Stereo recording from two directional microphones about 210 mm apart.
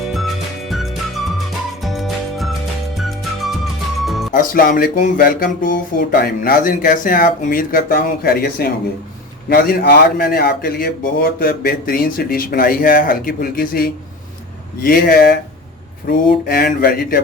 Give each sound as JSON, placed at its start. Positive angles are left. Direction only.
{"t": 0.7, "sound": "music", "side_deg": 0}
{"t": 4.3, "sound": "speech", "side_deg": 40}